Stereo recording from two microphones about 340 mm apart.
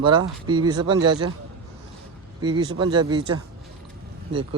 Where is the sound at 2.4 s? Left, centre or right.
Centre.